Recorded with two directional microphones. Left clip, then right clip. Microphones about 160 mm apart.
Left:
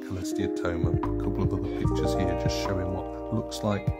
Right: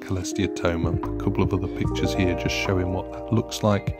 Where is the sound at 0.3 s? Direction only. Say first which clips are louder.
Right 4 dB; 40° right (ahead or behind).